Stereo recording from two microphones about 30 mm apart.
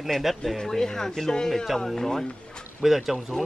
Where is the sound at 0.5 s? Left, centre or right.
Centre.